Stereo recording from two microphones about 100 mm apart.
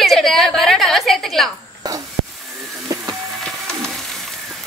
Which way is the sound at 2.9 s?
40° right (ahead or behind).